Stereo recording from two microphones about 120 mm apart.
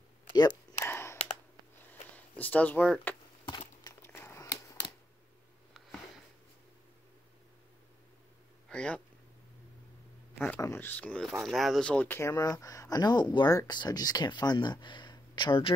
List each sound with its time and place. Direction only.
0.8 s computer keyboard: 20° left (ahead or behind)
1.1 s clicking: 70° left (ahead or behind)
2.1 s speech: 15° left (ahead or behind)
3.4 s a sound: 40° left (ahead or behind)
4.0 s crumpling: 20° left (ahead or behind)
8.6 s a sound: 10° left (ahead or behind)
10.6 s speech: 20° left (ahead or behind)
12.2 s speech: 30° left (ahead or behind)